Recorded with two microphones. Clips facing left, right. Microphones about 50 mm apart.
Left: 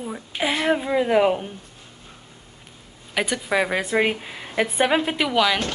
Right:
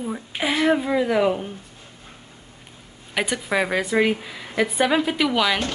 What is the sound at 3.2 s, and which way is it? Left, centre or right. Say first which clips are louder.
Speech: even; centre.